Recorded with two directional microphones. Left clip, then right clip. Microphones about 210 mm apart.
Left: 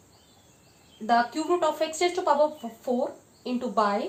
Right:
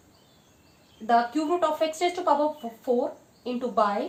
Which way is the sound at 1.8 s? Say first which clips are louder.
Right 1 dB; 25° left (ahead or behind).